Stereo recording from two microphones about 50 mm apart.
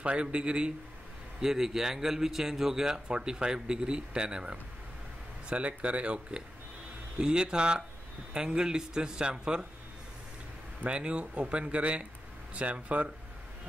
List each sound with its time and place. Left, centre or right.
0.0 s speech: right
1.4 s speech: centre
10.8 s speech: right